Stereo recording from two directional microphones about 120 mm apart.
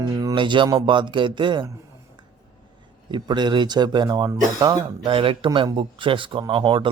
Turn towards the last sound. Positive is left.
turn(degrees=-40)  # may be behind; listen again after turning